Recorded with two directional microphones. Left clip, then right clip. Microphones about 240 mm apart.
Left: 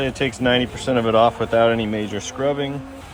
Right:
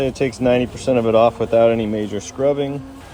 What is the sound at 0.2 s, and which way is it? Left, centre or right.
Speech, centre.